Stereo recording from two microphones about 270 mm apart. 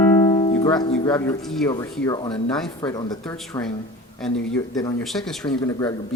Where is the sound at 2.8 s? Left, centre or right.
Centre.